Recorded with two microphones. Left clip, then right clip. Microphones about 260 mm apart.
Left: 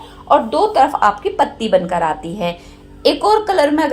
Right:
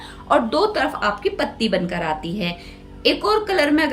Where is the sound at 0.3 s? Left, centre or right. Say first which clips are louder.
Left 4 dB; centre.